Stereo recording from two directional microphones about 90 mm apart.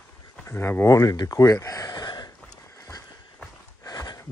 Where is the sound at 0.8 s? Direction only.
40° left (ahead or behind).